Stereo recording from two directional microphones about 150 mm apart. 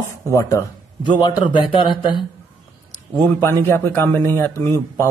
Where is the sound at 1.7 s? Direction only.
30° left (ahead or behind).